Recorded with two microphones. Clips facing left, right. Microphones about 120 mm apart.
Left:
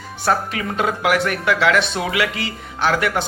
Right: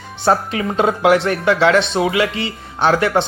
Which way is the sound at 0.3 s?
30° right (ahead or behind).